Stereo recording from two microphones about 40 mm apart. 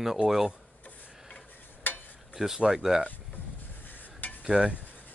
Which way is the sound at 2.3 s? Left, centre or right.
Centre.